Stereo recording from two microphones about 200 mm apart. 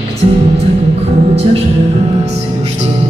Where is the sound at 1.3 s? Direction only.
30° right (ahead or behind).